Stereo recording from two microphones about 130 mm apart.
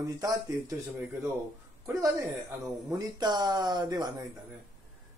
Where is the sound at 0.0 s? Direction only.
25° right (ahead or behind).